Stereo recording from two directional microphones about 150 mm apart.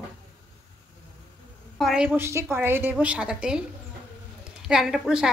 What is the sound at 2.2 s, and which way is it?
Speech, 15° right (ahead or behind).